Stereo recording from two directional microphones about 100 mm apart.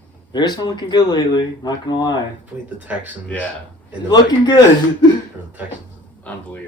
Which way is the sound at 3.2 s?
15° left (ahead or behind).